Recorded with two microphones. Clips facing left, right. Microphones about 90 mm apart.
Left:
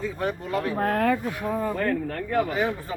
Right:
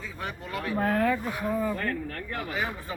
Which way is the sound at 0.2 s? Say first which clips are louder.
Left 5 dB; 40° left (ahead or behind).